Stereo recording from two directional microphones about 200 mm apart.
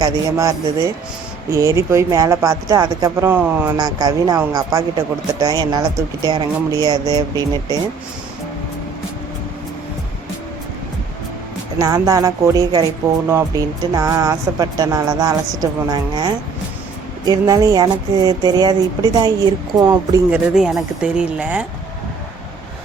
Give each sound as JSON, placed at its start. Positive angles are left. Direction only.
{"t": 0.0, "sound": "speech", "side_deg": -15}
{"t": 11.8, "sound": "speech", "side_deg": -15}
{"t": 20.3, "sound": "speech", "side_deg": 0}